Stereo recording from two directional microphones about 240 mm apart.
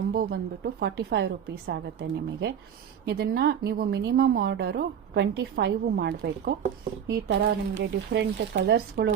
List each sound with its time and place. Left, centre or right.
0.1 s a woman's voice: right